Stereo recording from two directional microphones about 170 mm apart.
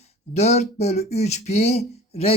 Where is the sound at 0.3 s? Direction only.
40° left (ahead or behind).